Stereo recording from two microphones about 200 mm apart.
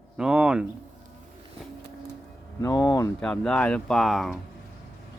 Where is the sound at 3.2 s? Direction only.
5° left (ahead or behind).